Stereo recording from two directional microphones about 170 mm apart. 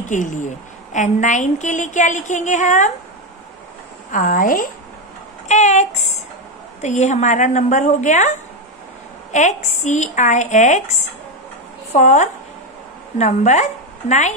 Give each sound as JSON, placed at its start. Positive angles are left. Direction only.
{"t": 0.1, "sound": "a woman's voice", "side_deg": 45}
{"t": 4.1, "sound": "a woman's voice", "side_deg": 50}
{"t": 5.5, "sound": "a sound", "side_deg": 45}
{"t": 6.8, "sound": "a woman's voice", "side_deg": 40}